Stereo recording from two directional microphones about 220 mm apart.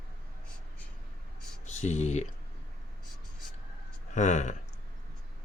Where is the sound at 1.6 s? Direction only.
30° left (ahead or behind).